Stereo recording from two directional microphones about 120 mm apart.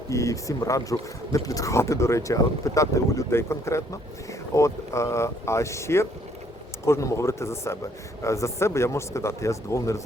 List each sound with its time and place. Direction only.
0.1 s speech: 25° left (ahead or behind)